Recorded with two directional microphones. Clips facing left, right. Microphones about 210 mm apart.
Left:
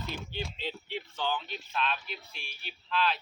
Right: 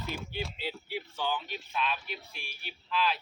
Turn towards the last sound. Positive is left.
turn(degrees=-10)  # may be behind; listen again after turning